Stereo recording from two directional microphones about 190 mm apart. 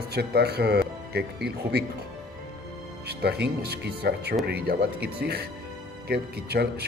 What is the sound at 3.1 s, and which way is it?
Speech, 60° right (ahead or behind).